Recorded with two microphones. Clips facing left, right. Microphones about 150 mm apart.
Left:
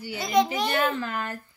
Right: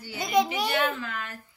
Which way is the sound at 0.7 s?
35° left (ahead or behind).